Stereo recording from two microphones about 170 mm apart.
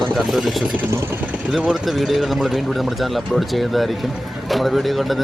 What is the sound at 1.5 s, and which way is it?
Speech, centre (ahead or behind).